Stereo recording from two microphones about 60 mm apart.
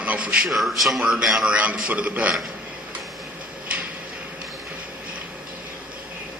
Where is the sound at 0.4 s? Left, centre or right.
Centre.